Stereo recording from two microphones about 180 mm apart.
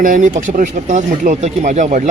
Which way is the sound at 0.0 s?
45° right (ahead or behind).